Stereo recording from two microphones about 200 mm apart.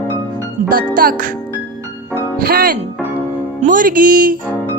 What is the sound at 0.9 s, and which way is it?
Speech, 45° right (ahead or behind).